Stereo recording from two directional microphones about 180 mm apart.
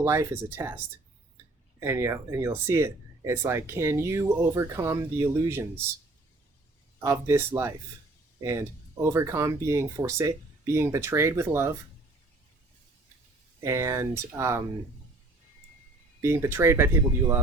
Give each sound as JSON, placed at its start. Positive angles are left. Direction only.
{"t": 0.0, "sound": "speech", "side_deg": -15}
{"t": 1.8, "sound": "speech", "side_deg": -15}
{"t": 7.0, "sound": "speech", "side_deg": -15}
{"t": 13.6, "sound": "speech", "side_deg": -15}
{"t": 16.2, "sound": "speech", "side_deg": -15}